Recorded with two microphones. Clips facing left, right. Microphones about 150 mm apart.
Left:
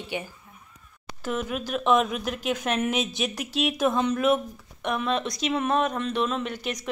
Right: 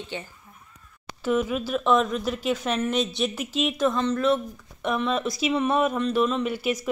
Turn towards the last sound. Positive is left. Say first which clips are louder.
# right 4 dB
turn(degrees=-5)  # may be behind; listen again after turning